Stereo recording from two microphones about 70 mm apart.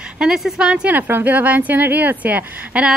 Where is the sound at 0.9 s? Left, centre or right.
Right.